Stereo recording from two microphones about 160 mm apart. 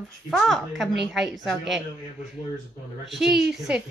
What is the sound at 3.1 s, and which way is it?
Speech, centre (ahead or behind).